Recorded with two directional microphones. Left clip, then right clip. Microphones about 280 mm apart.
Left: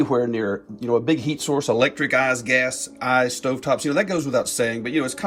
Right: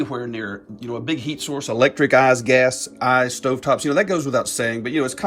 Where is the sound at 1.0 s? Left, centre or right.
Left.